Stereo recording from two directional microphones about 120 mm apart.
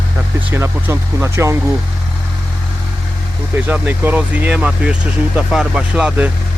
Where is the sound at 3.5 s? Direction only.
15° right (ahead or behind).